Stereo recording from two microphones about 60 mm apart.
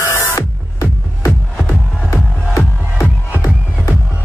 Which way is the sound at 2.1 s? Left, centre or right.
Left.